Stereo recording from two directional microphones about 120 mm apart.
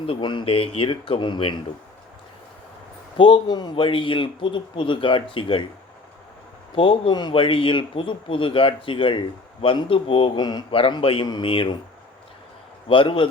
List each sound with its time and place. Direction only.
0.0 s a man's voice: 45° left (ahead or behind)
3.2 s a man's voice: 45° left (ahead or behind)
6.7 s a man's voice: 45° left (ahead or behind)
12.9 s a man's voice: 45° left (ahead or behind)